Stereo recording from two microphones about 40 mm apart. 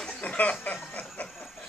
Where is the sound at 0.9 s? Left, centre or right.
Left.